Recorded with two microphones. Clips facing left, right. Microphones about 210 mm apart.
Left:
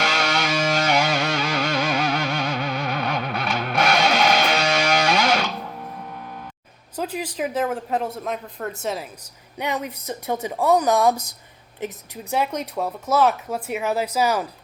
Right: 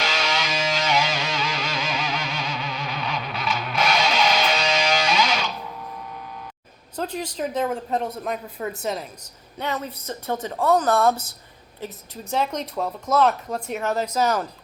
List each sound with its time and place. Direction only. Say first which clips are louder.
0.0 s music: left 3 dB; 55° left (ahead or behind)
6.1 s vehicle: left 1 dB; 50° left (ahead or behind)
6.9 s speech: left 1 dB; 5° left (ahead or behind)
9.6 s speech: left 2 dB; 15° left (ahead or behind)